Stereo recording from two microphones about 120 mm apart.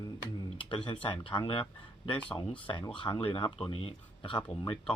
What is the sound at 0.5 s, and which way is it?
Speech, 45° left (ahead or behind).